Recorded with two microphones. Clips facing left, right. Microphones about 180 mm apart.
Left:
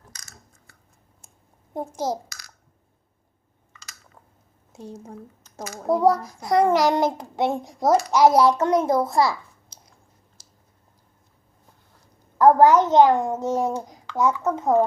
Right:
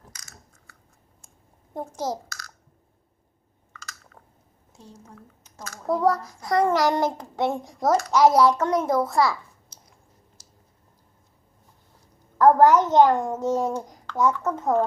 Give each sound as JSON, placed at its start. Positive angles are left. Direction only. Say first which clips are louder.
{"t": 1.7, "sound": "a child's voice", "louder": "left 2 dB", "side_deg": 15}
{"t": 4.8, "sound": "speech", "louder": "left 9 dB", "side_deg": 60}
{"t": 5.6, "sound": "a child's voice", "louder": "left 3 dB", "side_deg": 15}
{"t": 12.4, "sound": "a child's voice", "louder": "left 1 dB", "side_deg": 10}